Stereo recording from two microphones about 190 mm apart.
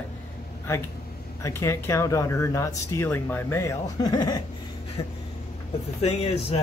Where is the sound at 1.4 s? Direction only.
15° left (ahead or behind).